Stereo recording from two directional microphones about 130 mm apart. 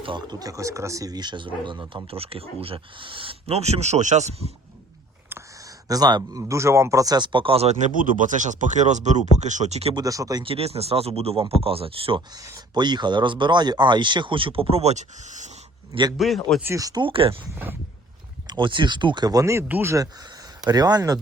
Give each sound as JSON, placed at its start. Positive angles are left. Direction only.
{"t": 0.0, "sound": "speech", "side_deg": -35}
{"t": 5.3, "sound": "a sound", "side_deg": -25}
{"t": 6.4, "sound": "speech", "side_deg": -20}
{"t": 9.9, "sound": "speech", "side_deg": -25}
{"t": 10.4, "sound": "speech", "side_deg": -50}
{"t": 12.3, "sound": "speech", "side_deg": -30}
{"t": 16.1, "sound": "a man's voice", "side_deg": 0}
{"t": 16.7, "sound": "speech", "side_deg": -30}
{"t": 18.4, "sound": "speech", "side_deg": -35}